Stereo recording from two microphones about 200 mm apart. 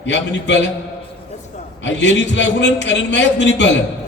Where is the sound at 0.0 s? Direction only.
60° left (ahead or behind).